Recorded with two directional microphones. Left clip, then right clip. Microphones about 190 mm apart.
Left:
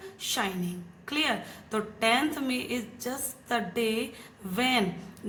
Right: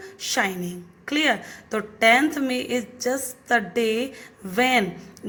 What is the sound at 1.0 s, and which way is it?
A woman's voice, 30° right (ahead or behind).